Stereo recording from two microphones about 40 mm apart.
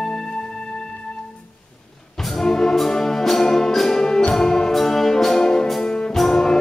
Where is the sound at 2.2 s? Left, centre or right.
Centre.